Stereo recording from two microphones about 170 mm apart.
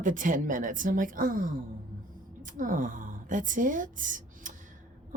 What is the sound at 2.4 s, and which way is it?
A woman's voice, 50° right (ahead or behind).